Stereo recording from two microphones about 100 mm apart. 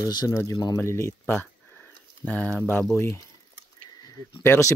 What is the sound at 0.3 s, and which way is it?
Speech, 25° left (ahead or behind).